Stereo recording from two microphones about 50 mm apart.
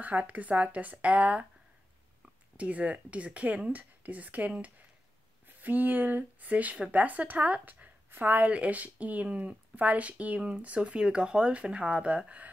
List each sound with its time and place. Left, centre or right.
0.0 s speech: right
2.5 s speech: right